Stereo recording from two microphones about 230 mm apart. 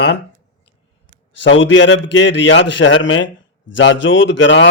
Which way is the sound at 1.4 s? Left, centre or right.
Left.